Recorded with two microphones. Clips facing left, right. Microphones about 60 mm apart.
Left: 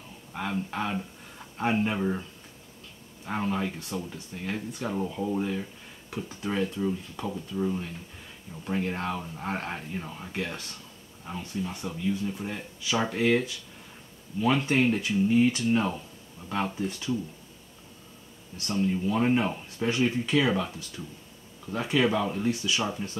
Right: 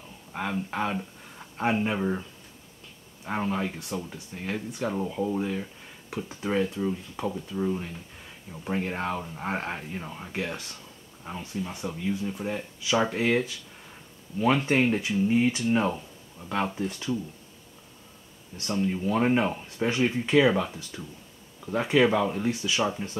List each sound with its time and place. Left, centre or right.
0.3 s speech: centre
3.3 s speech: centre
18.8 s speech: centre
22.5 s speech: right
22.8 s speech: centre